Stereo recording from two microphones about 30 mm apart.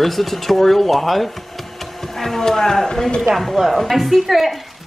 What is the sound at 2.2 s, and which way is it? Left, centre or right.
Speech, centre.